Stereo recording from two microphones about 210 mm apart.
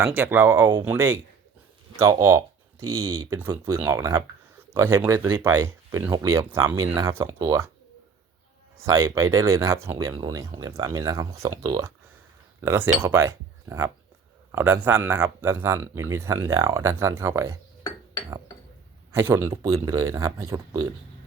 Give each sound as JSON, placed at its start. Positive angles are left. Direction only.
{"t": 0.0, "sound": "speech", "side_deg": -10}
{"t": 2.8, "sound": "speech", "side_deg": -90}
{"t": 3.2, "sound": "speech", "side_deg": -15}
{"t": 8.8, "sound": "speech", "side_deg": -15}
{"t": 19.1, "sound": "speech", "side_deg": -10}